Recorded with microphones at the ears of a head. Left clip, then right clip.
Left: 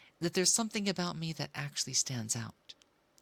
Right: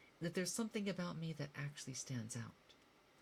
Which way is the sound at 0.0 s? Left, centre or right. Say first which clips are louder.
Left 12 dB; left.